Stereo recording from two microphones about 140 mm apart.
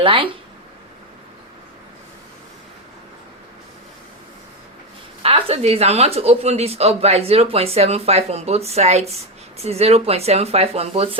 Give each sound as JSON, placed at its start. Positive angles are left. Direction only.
{"t": 0.0, "sound": "speech", "side_deg": -40}
{"t": 5.2, "sound": "a woman's voice", "side_deg": -45}